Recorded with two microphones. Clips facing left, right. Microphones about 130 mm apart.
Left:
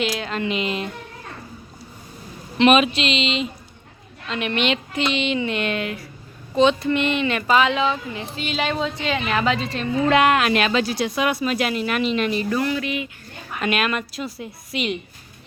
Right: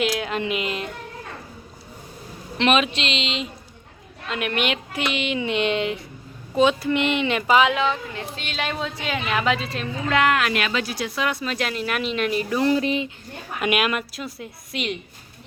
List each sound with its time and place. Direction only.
0.0 s speech: centre (ahead or behind)
2.6 s speech: 5° left (ahead or behind); by 6.0 s 20° right (ahead or behind)
6.6 s speech: 10° right (ahead or behind)
7.8 s speech: 5° left (ahead or behind)
10.1 s speech: 20° left (ahead or behind); by 12.5 s 5° right (ahead or behind)
12.5 s speech: 30° right (ahead or behind)
13.6 s speech: 10° right (ahead or behind)
14.1 s speech: centre (ahead or behind)